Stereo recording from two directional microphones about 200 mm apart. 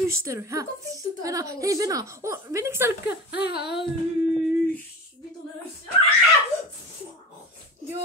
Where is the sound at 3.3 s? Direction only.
55° left (ahead or behind).